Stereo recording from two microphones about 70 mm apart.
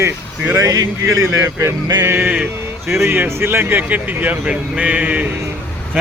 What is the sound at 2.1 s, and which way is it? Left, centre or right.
Speech, right.